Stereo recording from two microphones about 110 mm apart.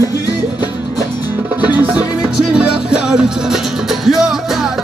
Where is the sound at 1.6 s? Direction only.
15° right (ahead or behind).